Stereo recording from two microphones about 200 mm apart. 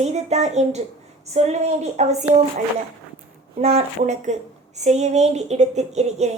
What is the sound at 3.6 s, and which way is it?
A woman's voice, 35° right (ahead or behind).